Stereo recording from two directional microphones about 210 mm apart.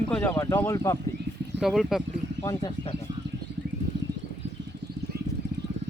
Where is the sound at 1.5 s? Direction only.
Centre (ahead or behind).